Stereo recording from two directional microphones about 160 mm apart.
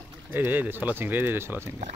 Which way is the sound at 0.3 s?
10° right (ahead or behind).